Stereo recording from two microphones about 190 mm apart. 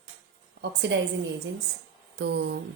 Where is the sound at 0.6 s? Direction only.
65° right (ahead or behind).